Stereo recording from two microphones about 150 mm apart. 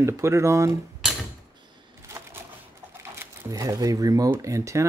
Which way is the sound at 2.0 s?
20° right (ahead or behind).